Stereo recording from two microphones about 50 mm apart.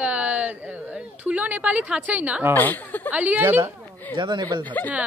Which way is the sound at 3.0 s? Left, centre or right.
Right.